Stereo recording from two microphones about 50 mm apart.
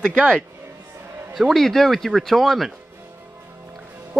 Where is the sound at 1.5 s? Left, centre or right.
Centre.